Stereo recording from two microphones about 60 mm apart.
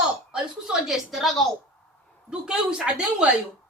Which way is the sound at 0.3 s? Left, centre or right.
Centre.